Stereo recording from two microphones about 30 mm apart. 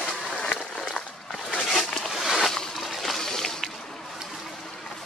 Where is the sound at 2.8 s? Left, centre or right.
Centre.